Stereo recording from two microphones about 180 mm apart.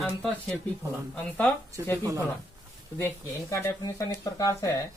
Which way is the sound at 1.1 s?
10° left (ahead or behind).